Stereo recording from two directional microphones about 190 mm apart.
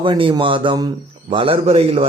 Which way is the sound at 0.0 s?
25° right (ahead or behind).